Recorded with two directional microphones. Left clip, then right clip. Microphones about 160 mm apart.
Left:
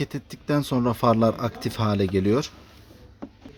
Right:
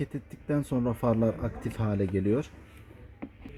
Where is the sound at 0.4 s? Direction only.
40° left (ahead or behind).